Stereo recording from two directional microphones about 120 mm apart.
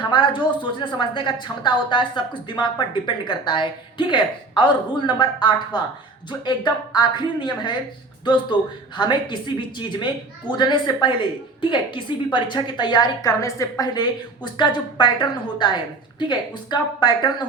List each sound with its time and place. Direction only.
0.0 s a woman's voice: 40° left (ahead or behind)